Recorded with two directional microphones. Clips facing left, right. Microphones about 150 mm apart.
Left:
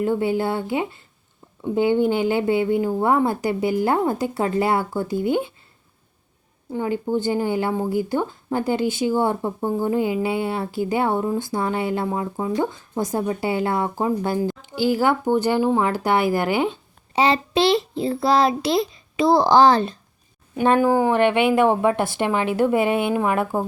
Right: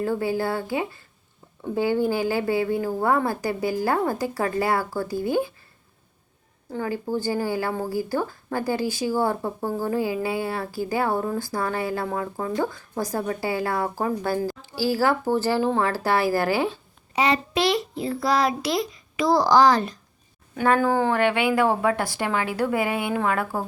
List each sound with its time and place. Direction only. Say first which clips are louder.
0.0 s speech: left 3 dB; 20° left (ahead or behind)
6.7 s speech: left 4 dB; 20° left (ahead or behind)